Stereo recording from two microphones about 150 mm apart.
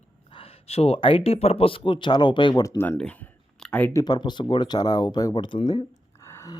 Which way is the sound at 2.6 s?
20° left (ahead or behind).